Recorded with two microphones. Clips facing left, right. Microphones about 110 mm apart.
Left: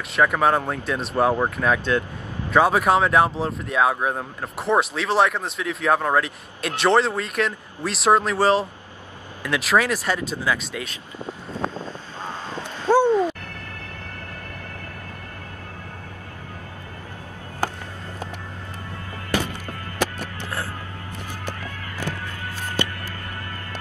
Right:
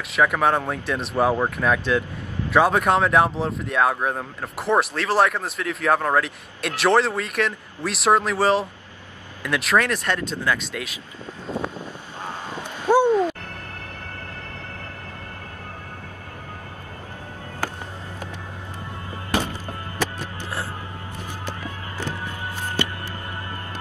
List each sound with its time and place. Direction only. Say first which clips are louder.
0.1 s speech: left 1 dB; centre (ahead or behind)
11.7 s a sound: left 2 dB; 15° right (ahead or behind)
20.2 s music: even; 20° right (ahead or behind)